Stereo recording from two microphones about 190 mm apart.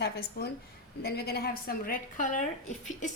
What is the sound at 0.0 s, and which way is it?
A woman's voice, 60° left (ahead or behind).